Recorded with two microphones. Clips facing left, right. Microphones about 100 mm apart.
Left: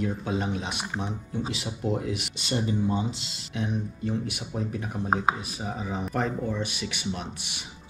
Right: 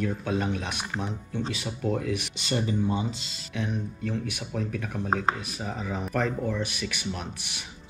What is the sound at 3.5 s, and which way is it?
Speech, 20° left (ahead or behind).